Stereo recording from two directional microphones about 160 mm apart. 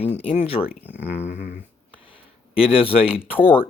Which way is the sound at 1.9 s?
35° left (ahead or behind).